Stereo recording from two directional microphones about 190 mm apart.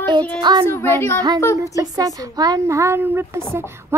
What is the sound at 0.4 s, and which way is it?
Music, 25° right (ahead or behind).